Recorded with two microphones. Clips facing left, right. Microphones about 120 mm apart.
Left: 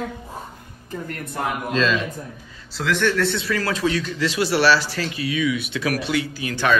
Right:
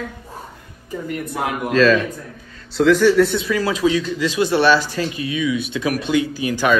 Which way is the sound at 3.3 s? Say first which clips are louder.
Right 4 dB; 15° right (ahead or behind).